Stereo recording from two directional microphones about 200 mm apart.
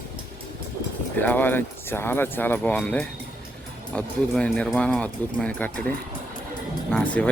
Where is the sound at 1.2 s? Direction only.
10° left (ahead or behind).